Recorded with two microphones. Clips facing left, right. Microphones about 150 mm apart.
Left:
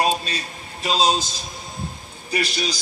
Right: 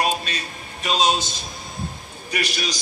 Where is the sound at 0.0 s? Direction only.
30° left (ahead or behind).